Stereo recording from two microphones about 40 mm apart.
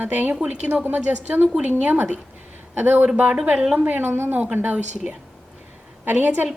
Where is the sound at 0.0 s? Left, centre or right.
Right.